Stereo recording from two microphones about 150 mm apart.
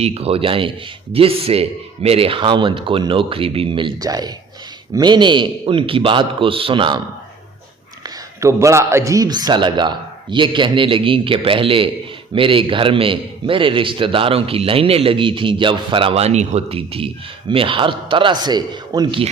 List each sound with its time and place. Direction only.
0.0 s a man's voice: 45° right (ahead or behind)
8.4 s a man's voice: 20° right (ahead or behind)